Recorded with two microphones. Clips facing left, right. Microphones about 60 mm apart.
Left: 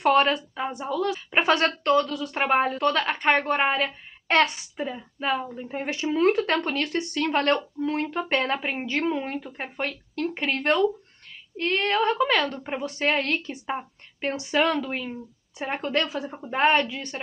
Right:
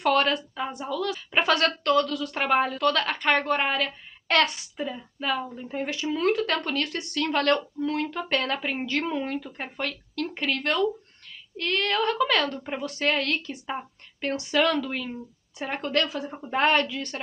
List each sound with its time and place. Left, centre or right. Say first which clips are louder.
0.0 s a woman's voice: left 3 dB; left
16.3 s a woman's voice: left 1 dB; centre
16.5 s a woman's voice: left 1 dB; centre